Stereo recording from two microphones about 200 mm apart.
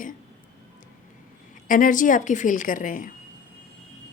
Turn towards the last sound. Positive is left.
turn(degrees=40)  # may be behind; listen again after turning